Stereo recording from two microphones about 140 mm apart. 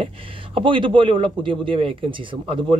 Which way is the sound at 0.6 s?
35° right (ahead or behind).